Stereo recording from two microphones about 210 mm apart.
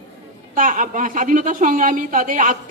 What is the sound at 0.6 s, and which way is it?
A woman's voice, 40° right (ahead or behind).